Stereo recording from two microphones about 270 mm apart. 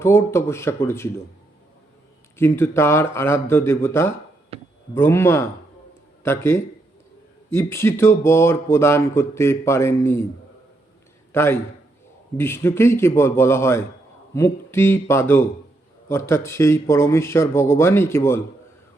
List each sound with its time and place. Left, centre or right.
0.0 s speech: centre
2.4 s speech: centre
4.5 s a sound: right
4.9 s speech: centre
11.3 s a man's voice: centre